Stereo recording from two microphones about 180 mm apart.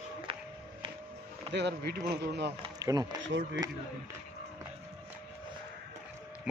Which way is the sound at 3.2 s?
85° right.